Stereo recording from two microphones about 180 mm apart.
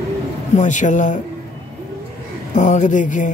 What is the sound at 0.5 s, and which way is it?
Speech, 45° left (ahead or behind).